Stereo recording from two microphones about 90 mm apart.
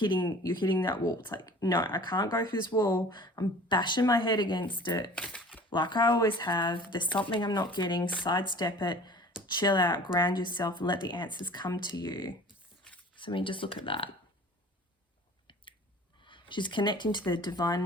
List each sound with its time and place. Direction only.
0.4 s speech: 60° left (ahead or behind)
5.1 s speech: 10° left (ahead or behind)
5.7 s speech: 55° left (ahead or behind)
13.1 s speech: 65° left (ahead or behind)
16.2 s speech: 65° left (ahead or behind)